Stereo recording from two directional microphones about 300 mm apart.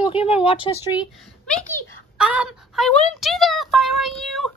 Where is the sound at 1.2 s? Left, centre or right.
Centre.